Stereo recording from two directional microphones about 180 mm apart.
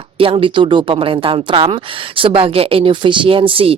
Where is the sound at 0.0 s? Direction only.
30° right (ahead or behind).